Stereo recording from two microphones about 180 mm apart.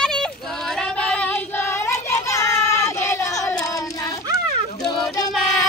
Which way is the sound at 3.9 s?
20° left (ahead or behind).